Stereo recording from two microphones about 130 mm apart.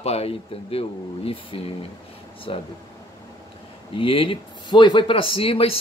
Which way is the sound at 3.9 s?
45° left (ahead or behind).